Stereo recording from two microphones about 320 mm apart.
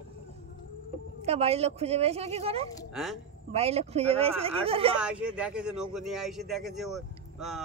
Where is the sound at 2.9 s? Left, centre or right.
Centre.